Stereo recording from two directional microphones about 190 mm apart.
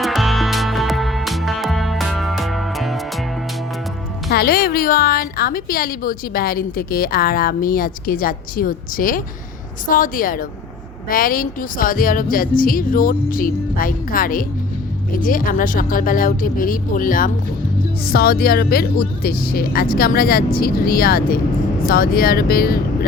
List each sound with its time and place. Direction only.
0.0 s music: centre (ahead or behind)
4.3 s a woman's voice: 55° left (ahead or behind)